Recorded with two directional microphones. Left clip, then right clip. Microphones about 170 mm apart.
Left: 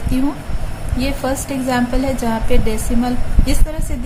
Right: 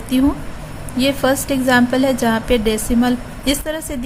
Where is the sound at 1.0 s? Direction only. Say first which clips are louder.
Right 5 dB; 50° right (ahead or behind).